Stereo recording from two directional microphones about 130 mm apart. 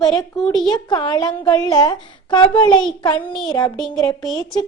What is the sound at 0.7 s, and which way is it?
A woman's voice, 35° left (ahead or behind).